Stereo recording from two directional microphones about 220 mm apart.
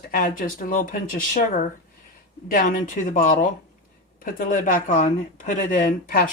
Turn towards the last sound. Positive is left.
turn(degrees=40)  # may be behind; listen again after turning